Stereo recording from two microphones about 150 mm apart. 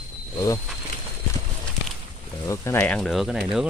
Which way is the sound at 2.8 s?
5° left (ahead or behind).